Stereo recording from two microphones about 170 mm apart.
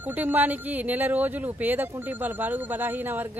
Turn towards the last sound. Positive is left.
turn(degrees=-10)  # may be behind; listen again after turning